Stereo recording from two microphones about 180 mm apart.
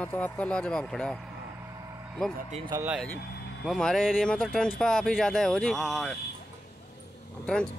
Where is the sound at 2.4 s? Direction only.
40° right (ahead or behind).